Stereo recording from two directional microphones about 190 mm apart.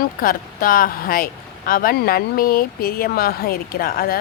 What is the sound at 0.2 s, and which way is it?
Speech, 50° left (ahead or behind).